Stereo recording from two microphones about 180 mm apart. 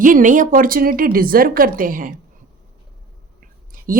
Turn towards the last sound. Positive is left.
turn(degrees=-50)  # may be behind; listen again after turning